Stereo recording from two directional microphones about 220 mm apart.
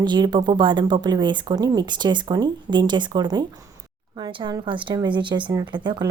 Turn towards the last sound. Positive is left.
turn(degrees=-20)  # may be behind; listen again after turning